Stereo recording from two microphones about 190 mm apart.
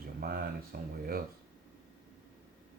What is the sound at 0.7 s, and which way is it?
Speech, 55° right (ahead or behind).